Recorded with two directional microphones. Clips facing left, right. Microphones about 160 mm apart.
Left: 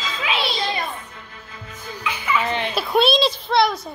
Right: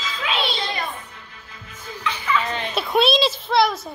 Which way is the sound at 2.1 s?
10° left (ahead or behind).